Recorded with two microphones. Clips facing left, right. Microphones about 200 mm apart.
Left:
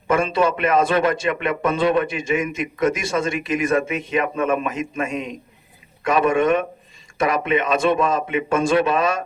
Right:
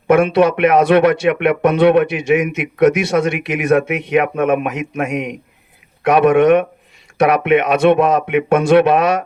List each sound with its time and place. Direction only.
0.1 s a man's voice: 65° right (ahead or behind)